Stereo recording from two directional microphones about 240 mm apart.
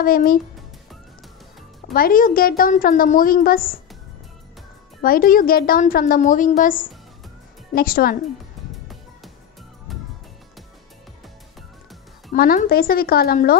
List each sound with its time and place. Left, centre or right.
0.0 s a woman's voice: left
2.0 s a woman's voice: left
5.0 s a woman's voice: left
9.9 s music: centre
12.3 s a woman's voice: left